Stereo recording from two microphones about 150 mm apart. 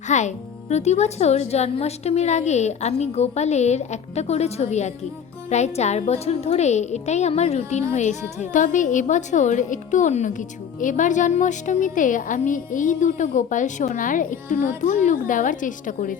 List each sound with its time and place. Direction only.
0.1 s a woman's voice: 50° left (ahead or behind)